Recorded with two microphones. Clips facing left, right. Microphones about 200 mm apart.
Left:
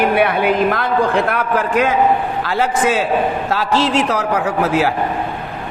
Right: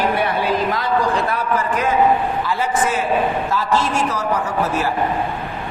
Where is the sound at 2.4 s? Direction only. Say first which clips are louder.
Left 3 dB; 75° left (ahead or behind).